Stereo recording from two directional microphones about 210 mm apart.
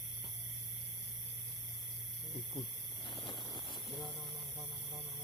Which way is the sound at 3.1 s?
25° left (ahead or behind).